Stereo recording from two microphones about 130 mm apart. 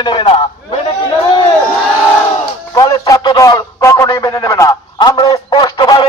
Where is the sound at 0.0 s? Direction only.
40° left (ahead or behind).